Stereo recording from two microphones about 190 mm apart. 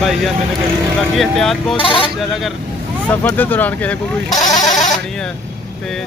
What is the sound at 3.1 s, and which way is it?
Speech, 10° left (ahead or behind).